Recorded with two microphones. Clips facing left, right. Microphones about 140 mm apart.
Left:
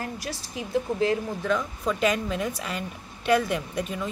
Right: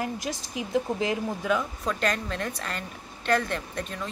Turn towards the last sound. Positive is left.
turn(degrees=5)  # may be behind; listen again after turning